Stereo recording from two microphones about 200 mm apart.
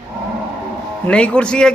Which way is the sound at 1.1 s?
5° left (ahead or behind).